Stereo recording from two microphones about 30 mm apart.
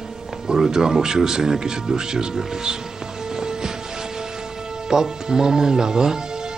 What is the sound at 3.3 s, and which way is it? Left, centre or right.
Music, right.